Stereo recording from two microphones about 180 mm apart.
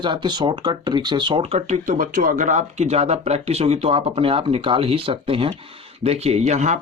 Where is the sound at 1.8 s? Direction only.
50° right (ahead or behind).